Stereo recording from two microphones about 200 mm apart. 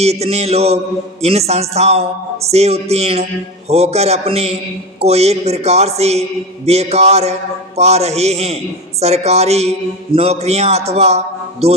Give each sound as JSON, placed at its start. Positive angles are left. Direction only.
{"t": 0.0, "sound": "a man's voice", "side_deg": -30}